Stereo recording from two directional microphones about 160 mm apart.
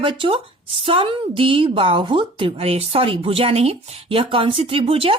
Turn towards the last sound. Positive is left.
turn(degrees=-35)  # may be behind; listen again after turning